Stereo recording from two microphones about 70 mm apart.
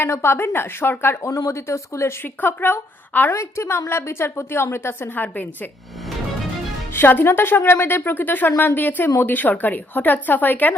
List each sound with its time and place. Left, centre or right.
0.0 s a woman's voice: left
1.2 s speech: left
2.4 s speech: left
3.3 s a woman's voice: left
5.1 s speech: left
6.9 s speech: left